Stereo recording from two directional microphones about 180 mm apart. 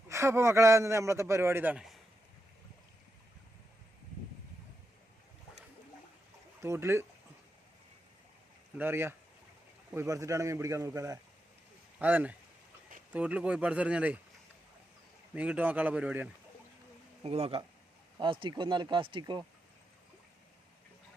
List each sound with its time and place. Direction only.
0.1 s a man's voice: 15° right (ahead or behind)
6.6 s a man's voice: 15° right (ahead or behind)
8.8 s a man's voice: 10° right (ahead or behind)
15.4 s a man's voice: 10° right (ahead or behind)
17.2 s speech: 35° right (ahead or behind)